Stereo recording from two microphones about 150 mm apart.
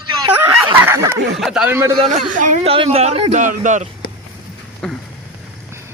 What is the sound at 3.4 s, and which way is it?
Speech, 55° right (ahead or behind).